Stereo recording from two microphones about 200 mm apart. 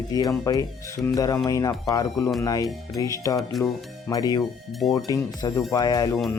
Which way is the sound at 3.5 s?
Centre (ahead or behind).